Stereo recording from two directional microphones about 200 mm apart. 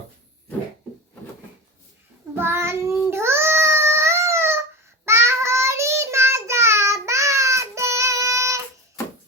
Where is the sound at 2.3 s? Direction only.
10° right (ahead or behind).